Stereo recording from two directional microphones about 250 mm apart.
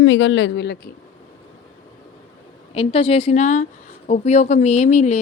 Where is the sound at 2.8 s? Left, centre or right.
Left.